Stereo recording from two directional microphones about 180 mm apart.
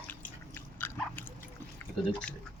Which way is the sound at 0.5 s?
10° left (ahead or behind).